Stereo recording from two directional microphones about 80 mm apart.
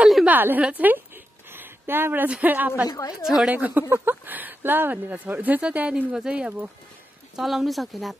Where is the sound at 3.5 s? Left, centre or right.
Centre.